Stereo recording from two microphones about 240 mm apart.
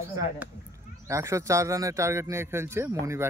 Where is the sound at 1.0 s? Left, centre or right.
Centre.